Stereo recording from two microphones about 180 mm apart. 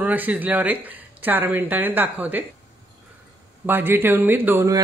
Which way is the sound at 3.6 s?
10° right (ahead or behind).